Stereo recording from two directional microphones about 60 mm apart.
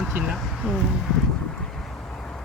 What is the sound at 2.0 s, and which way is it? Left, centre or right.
Vehicle, left.